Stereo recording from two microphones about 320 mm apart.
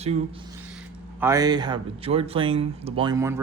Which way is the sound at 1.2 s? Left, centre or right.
Centre.